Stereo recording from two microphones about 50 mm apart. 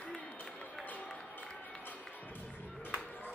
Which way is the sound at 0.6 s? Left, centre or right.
Left.